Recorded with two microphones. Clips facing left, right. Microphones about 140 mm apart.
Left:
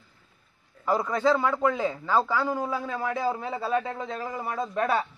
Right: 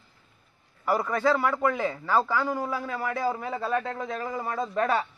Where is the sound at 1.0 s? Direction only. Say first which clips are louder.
Left 1 dB; 15° left (ahead or behind).